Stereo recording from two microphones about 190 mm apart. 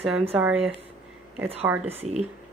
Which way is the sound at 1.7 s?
10° right (ahead or behind).